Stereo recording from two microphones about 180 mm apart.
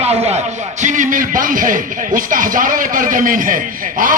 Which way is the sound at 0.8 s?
45° right (ahead or behind).